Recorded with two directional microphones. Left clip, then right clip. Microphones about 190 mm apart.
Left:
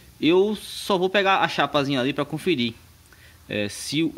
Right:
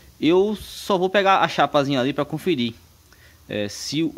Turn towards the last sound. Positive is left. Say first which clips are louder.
# even
turn(degrees=-5)  # may be behind; listen again after turning